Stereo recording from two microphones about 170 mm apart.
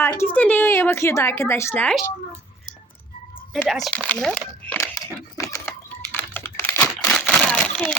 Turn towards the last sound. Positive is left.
turn(degrees=5)  # may be behind; listen again after turning